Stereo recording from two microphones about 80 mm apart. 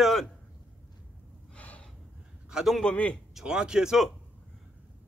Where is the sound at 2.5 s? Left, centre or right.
Centre.